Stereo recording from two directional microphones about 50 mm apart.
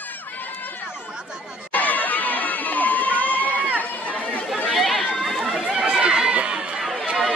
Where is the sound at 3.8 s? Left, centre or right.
Left.